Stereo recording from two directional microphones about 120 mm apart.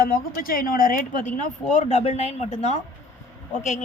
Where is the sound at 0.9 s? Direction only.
90° left; by 2.8 s 75° left (ahead or behind).